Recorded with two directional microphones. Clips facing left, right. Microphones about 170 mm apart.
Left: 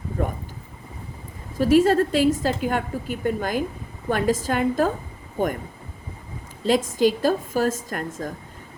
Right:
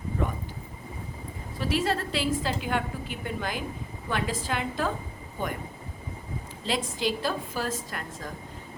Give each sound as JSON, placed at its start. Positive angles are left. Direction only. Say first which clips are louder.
{"t": 1.5, "sound": "a woman's voice", "louder": "left 11 dB", "side_deg": 45}
{"t": 6.7, "sound": "a woman's voice", "louder": "left 9 dB", "side_deg": 45}